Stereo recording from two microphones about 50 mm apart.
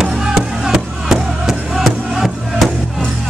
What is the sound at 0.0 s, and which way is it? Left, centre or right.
Music, centre.